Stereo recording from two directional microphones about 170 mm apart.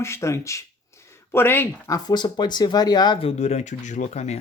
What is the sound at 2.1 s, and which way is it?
Speech, 25° left (ahead or behind).